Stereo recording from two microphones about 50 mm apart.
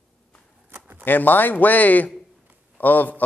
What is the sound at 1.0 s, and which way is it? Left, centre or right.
A man's voice, left.